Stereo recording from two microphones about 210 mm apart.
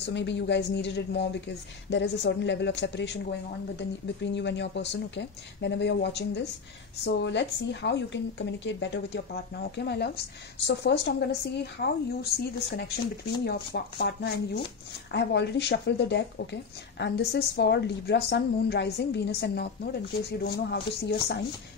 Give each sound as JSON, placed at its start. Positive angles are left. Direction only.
{"t": 0.0, "sound": "a woman's voice", "side_deg": 55}